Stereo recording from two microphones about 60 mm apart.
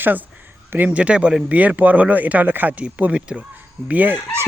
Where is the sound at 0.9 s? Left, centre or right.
Right.